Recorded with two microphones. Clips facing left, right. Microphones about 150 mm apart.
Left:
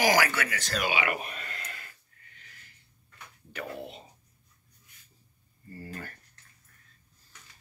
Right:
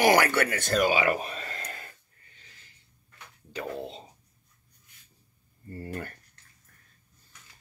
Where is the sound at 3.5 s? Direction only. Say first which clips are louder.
Right 3 dB; 20° right (ahead or behind).